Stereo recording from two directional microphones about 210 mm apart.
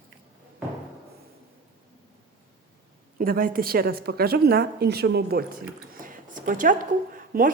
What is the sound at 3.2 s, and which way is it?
A woman's voice, 45° right (ahead or behind).